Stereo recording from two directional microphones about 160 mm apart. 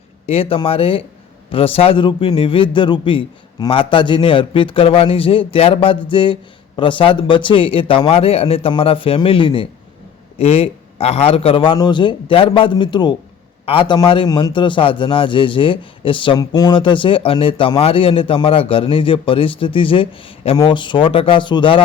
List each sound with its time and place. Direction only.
0.3 s a man's voice: 35° left (ahead or behind)